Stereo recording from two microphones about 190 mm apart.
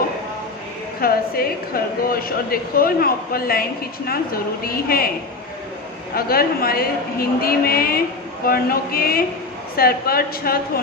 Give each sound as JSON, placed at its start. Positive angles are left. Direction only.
{"t": 1.0, "sound": "a woman's voice", "side_deg": 50}
{"t": 4.6, "sound": "a woman's voice", "side_deg": 50}
{"t": 6.1, "sound": "a woman's voice", "side_deg": 50}